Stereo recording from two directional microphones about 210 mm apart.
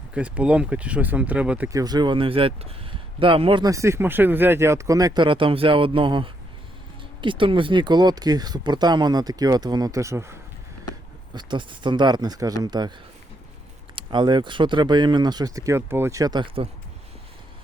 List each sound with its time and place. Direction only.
0.1 s speech: 5° right (ahead or behind)
11.3 s speech: 20° right (ahead or behind)
13.9 s speech: 20° right (ahead or behind)